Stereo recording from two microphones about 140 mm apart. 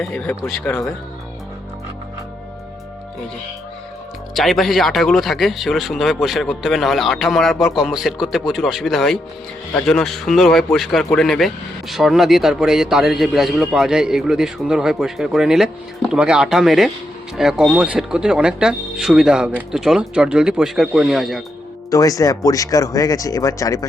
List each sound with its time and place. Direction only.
0.0 s speech: 5° left (ahead or behind)
4.4 s a man's voice: centre (ahead or behind)
21.8 s speech: 25° left (ahead or behind)